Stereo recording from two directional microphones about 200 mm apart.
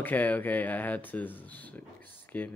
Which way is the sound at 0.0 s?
10° left (ahead or behind).